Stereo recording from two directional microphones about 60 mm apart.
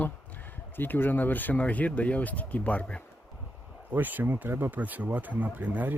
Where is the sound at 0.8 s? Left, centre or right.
Left.